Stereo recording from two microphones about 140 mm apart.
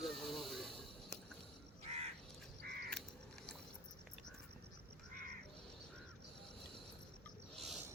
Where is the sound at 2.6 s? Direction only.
90° right.